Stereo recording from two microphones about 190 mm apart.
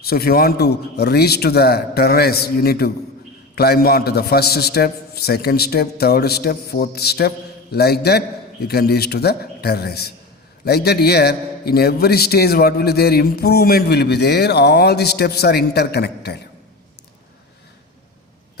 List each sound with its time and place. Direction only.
0.0 s a man's voice: 55° left (ahead or behind)